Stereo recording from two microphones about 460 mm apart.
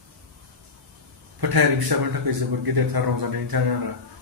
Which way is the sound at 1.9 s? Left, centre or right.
Right.